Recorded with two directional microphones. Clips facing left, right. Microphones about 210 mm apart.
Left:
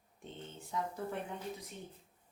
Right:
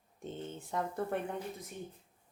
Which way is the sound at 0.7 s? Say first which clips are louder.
Right 2 dB; 60° right (ahead or behind).